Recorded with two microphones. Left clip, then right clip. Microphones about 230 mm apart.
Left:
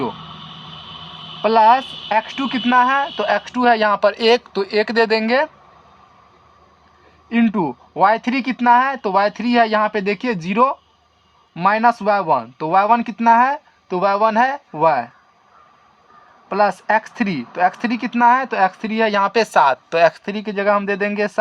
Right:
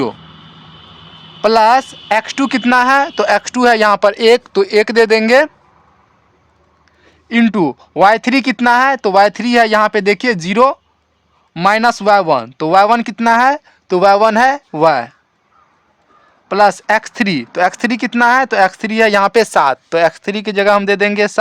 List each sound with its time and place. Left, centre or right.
1.4 s speech: right
7.3 s speech: right
16.5 s speech: right